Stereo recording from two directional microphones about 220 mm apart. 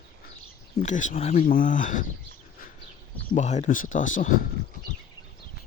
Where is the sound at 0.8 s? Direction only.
35° left (ahead or behind).